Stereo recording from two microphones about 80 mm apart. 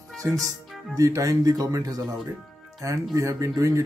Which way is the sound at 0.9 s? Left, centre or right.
Right.